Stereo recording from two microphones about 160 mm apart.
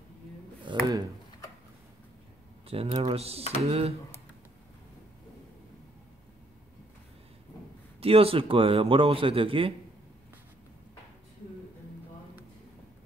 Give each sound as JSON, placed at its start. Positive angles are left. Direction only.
{"t": 0.7, "sound": "a sound", "side_deg": -30}
{"t": 2.7, "sound": "a man's voice", "side_deg": -35}
{"t": 8.0, "sound": "a man's voice", "side_deg": -35}